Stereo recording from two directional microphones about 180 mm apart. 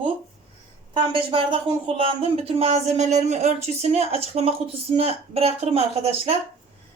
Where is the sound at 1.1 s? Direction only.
30° right (ahead or behind).